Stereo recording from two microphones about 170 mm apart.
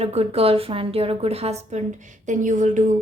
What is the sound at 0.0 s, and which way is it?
A woman's voice, 35° right (ahead or behind).